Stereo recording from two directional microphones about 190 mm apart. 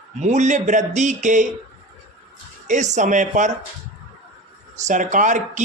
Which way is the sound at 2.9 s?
40° right (ahead or behind).